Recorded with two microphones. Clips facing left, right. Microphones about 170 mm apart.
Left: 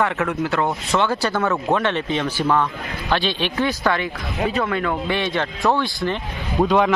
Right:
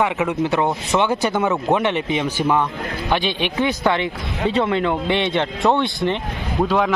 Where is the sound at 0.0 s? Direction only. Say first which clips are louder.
Right 2 dB; 15° right (ahead or behind).